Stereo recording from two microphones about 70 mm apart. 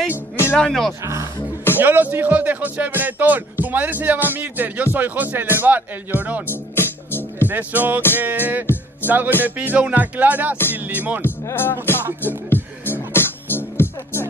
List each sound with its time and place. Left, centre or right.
0.1 s music: left
0.6 s speech: centre
1.0 s speech: right
1.8 s speech: right
6.5 s music: left
7.4 s speech: right
9.0 s music: right
9.4 s speech: right
11.5 s music: left